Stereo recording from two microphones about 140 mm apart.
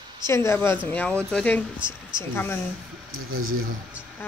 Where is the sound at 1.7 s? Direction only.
35° right (ahead or behind).